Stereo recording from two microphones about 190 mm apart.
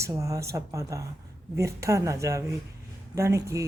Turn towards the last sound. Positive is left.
turn(degrees=-15)  # may be behind; listen again after turning